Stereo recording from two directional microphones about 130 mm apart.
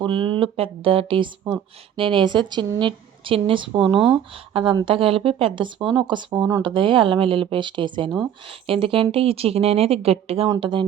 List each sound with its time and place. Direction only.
0.0 s speech: 40° right (ahead or behind)